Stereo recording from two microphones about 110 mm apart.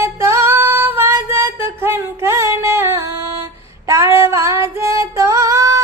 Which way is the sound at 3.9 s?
25° right (ahead or behind).